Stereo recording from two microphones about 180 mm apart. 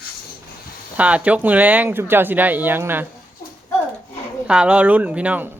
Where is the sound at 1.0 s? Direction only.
5° right (ahead or behind).